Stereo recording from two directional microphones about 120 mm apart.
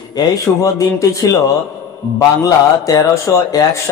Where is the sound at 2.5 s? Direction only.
30° left (ahead or behind).